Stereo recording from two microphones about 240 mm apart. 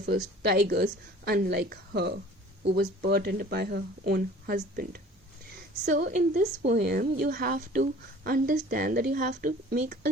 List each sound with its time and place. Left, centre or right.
0.0 s a woman's voice: right